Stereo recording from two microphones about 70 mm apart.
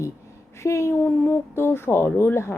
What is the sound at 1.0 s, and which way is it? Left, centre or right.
Speech, left.